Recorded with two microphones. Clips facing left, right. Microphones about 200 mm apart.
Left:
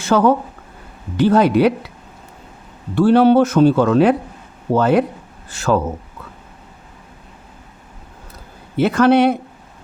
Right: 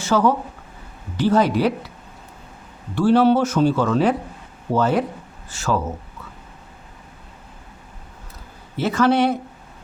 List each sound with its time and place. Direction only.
0.0 s speech: 55° left (ahead or behind)
2.9 s speech: 60° left (ahead or behind)
8.7 s speech: 60° left (ahead or behind)